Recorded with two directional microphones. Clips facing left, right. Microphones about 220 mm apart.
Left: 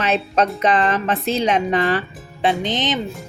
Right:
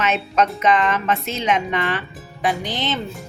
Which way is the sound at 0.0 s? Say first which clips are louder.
Left 1 dB; 35° left (ahead or behind).